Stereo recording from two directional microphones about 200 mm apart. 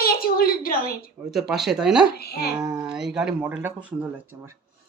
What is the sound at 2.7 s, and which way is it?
Speech, 5° right (ahead or behind).